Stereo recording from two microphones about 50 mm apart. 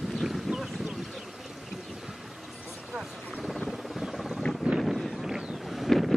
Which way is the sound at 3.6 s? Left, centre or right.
Centre.